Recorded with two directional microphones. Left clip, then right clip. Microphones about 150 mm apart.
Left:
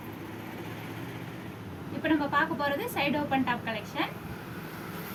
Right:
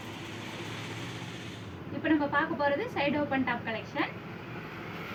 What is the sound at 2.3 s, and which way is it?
A woman's voice, 15° left (ahead or behind).